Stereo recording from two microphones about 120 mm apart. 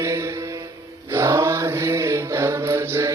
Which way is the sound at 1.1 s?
25° right (ahead or behind).